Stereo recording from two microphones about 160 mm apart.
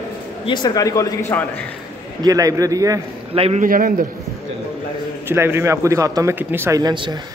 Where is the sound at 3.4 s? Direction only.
40° right (ahead or behind).